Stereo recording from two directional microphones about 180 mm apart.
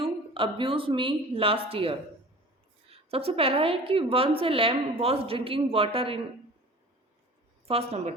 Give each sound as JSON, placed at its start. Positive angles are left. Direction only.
{"t": 0.0, "sound": "a woman's voice", "side_deg": -30}
{"t": 7.7, "sound": "a woman's voice", "side_deg": -35}